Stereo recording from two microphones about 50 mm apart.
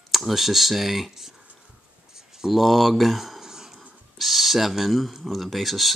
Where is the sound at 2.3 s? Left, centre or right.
Centre.